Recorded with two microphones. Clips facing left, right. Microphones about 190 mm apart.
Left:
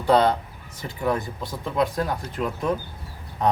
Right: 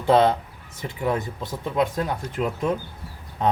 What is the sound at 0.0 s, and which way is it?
Speech, 25° right (ahead or behind).